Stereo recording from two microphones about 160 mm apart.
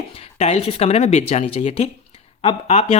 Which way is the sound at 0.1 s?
40° left (ahead or behind).